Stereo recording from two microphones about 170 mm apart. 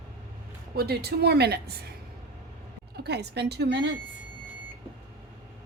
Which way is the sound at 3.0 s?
80° right.